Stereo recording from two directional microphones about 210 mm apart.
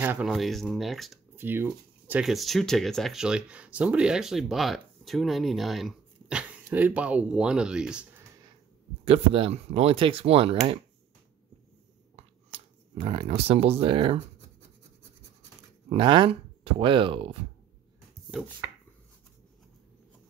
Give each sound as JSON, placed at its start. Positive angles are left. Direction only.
{"t": 0.0, "sound": "speech", "side_deg": -5}
{"t": 9.0, "sound": "speech", "side_deg": -25}
{"t": 12.2, "sound": "a sound", "side_deg": -30}
{"t": 15.9, "sound": "speech", "side_deg": -25}